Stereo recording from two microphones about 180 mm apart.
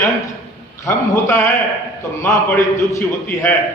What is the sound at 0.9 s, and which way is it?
A man's voice, 15° left (ahead or behind).